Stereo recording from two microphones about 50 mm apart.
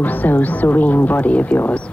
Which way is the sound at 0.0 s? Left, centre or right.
Left.